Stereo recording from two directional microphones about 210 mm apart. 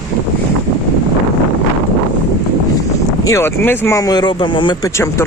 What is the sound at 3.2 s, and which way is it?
Speech, 15° left (ahead or behind).